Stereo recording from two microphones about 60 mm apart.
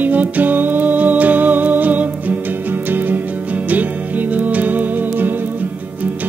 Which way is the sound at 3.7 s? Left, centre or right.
Right.